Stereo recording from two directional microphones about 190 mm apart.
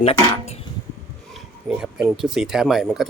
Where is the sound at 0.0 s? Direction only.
35° left (ahead or behind).